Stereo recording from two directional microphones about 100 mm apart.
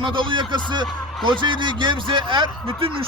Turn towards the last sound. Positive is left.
turn(degrees=-60)  # may be behind; listen again after turning